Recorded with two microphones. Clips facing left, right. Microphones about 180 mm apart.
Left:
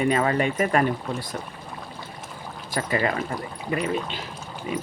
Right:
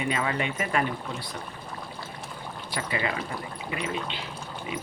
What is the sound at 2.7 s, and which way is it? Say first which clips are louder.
Speech: left 6 dB; 45° left (ahead or behind).